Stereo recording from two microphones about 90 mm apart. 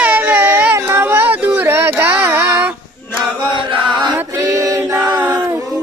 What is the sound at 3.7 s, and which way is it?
Chant, 55° right (ahead or behind).